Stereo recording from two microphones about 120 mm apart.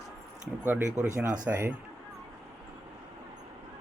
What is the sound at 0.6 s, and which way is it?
Speech, 20° right (ahead or behind).